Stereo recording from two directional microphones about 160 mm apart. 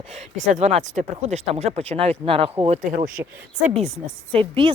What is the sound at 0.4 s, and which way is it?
A woman's voice, 45° right (ahead or behind).